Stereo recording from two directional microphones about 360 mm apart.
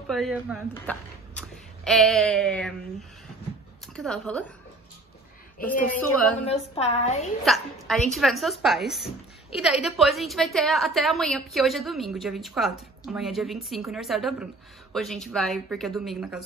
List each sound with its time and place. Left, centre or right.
0.1 s speech: centre
5.9 s speech: centre
6.5 s a woman's voice: centre
7.4 s speech: centre